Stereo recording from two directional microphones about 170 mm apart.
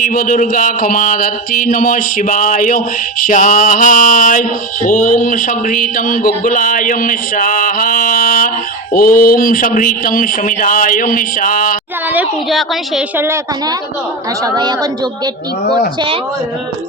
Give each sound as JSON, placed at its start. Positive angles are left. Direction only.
{"t": 0.0, "sound": "speech", "side_deg": 55}
{"t": 12.1, "sound": "a woman's voice", "side_deg": -5}
{"t": 13.1, "sound": "a woman's voice", "side_deg": -15}